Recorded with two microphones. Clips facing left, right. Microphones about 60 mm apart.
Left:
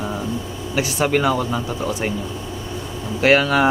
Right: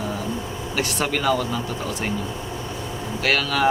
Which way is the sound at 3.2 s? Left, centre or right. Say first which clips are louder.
Left 6 dB; left.